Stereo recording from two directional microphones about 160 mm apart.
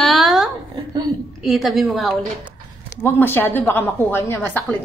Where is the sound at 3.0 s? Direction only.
15° left (ahead or behind).